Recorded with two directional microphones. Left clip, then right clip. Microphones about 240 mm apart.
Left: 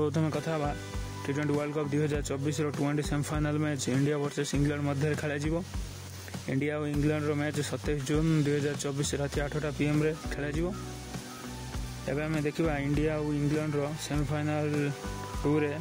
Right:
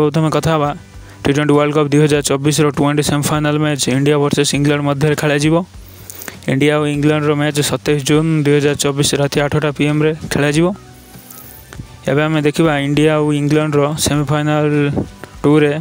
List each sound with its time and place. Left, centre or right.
0.0 s speech: right
12.1 s speech: right